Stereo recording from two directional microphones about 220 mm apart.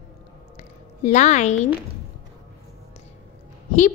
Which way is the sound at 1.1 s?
30° left (ahead or behind).